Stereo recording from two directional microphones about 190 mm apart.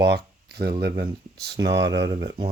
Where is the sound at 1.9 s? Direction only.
70° right (ahead or behind).